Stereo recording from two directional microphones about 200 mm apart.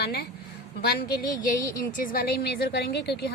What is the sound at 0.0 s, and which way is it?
A woman's voice, 55° left (ahead or behind).